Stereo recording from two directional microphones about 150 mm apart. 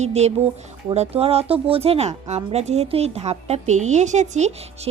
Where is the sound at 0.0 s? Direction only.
45° right (ahead or behind).